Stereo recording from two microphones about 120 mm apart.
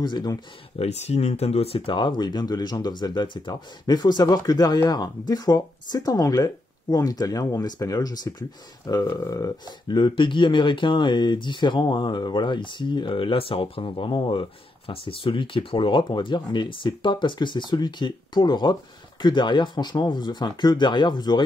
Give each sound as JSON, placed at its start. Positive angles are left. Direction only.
{"t": 0.0, "sound": "speech", "side_deg": 35}
{"t": 0.7, "sound": "speech", "side_deg": 65}